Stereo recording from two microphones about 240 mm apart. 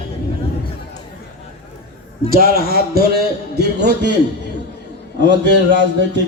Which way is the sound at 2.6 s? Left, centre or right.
Right.